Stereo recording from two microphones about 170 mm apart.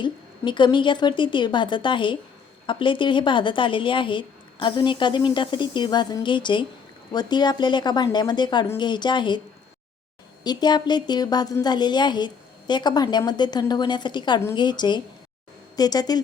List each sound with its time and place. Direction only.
0.0 s a woman's voice: 25° left (ahead or behind)
10.4 s a woman's voice: 25° left (ahead or behind)